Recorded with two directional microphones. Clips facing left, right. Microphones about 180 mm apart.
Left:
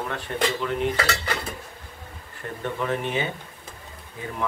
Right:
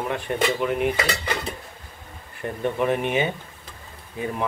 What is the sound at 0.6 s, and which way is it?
Cutlery, 15° right (ahead or behind).